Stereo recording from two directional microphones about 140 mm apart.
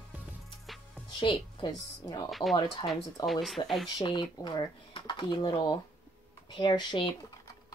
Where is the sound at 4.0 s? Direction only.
30° left (ahead or behind).